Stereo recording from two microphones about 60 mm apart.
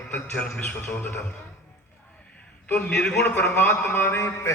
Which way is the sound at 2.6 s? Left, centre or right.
Left.